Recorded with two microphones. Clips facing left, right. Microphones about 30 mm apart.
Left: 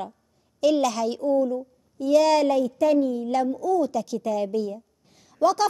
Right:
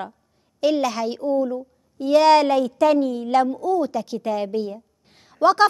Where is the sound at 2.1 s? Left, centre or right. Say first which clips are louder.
Right 4 dB; right.